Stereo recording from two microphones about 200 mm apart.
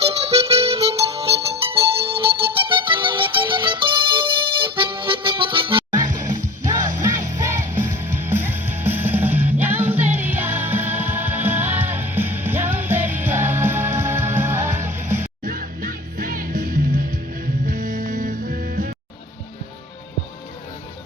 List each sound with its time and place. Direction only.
0.0 s music: 30° right (ahead or behind)
7.0 s music: 15° right (ahead or behind)
15.2 s music: 45° right (ahead or behind)